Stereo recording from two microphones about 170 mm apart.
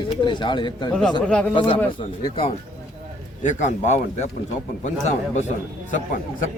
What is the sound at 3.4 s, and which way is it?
Speech, 45° left (ahead or behind).